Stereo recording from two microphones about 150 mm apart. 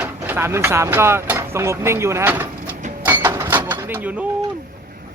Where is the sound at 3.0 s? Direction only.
10° right (ahead or behind).